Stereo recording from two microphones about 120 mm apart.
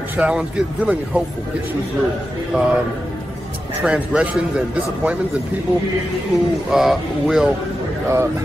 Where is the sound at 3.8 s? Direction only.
10° right (ahead or behind).